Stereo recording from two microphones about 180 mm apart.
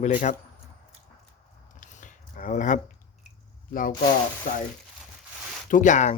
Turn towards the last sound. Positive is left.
turn(degrees=40)  # may be behind; listen again after turning